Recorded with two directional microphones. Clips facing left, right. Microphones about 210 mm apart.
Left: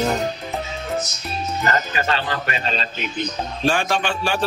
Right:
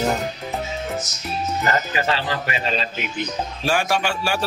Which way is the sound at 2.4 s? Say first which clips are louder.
Right 1 dB; 15° right (ahead or behind).